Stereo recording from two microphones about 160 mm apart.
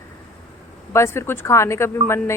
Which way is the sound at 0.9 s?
15° left (ahead or behind).